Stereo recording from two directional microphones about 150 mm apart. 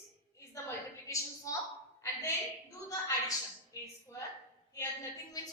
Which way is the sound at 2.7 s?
25° left (ahead or behind).